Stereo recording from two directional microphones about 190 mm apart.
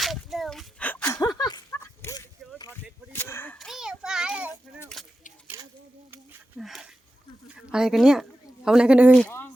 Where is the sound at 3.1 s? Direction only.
10° left (ahead or behind).